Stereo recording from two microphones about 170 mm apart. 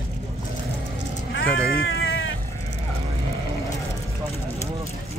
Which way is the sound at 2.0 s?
90° left.